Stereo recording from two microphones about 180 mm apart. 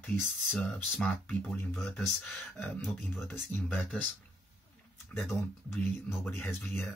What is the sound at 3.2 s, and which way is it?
Speech, 10° left (ahead or behind).